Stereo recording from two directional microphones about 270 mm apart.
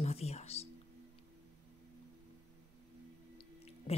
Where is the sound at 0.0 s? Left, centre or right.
Left.